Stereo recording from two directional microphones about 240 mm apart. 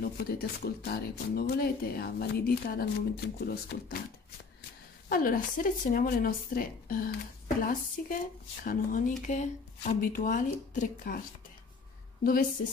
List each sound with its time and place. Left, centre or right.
0.0 s speech: left
5.1 s speech: left
12.2 s a woman's voice: left